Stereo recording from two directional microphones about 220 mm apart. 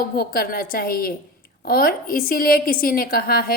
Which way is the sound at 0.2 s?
40° left (ahead or behind).